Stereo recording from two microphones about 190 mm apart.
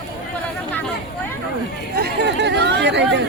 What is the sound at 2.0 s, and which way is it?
Chatter, 60° right (ahead or behind).